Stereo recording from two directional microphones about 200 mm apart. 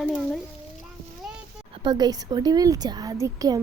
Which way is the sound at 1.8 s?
20° right (ahead or behind).